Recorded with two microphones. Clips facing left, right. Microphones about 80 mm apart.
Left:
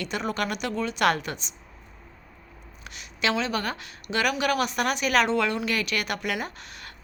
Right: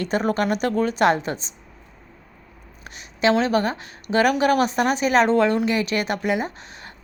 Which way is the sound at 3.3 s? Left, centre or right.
Right.